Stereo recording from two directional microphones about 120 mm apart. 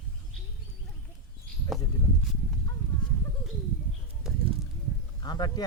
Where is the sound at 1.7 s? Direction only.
Centre (ahead or behind).